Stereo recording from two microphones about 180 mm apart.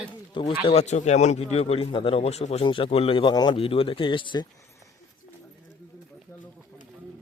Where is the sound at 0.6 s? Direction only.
35° left (ahead or behind).